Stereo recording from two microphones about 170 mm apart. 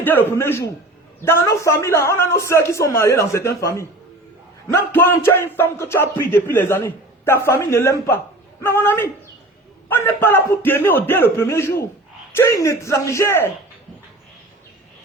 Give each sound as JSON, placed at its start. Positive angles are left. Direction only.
{"t": 0.0, "sound": "speech", "side_deg": 10}